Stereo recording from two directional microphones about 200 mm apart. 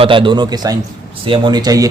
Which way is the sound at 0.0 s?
25° right (ahead or behind).